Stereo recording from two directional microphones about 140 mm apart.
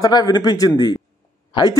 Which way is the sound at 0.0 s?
30° left (ahead or behind).